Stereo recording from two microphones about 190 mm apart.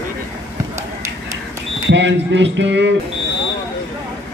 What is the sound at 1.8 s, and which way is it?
Speech, 70° right (ahead or behind).